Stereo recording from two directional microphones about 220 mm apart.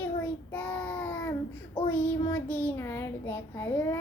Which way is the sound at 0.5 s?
5° left (ahead or behind).